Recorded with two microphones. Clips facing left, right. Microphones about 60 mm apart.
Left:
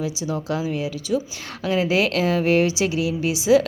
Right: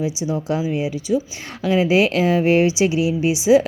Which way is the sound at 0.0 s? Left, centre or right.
Centre.